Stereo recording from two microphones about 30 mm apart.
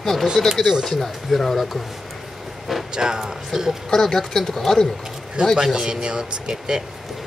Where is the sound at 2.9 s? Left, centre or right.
Right.